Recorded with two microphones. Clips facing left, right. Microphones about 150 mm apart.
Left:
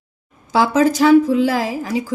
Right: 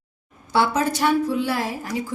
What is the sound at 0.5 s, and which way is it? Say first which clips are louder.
A woman's voice: left 6 dB; 90° left.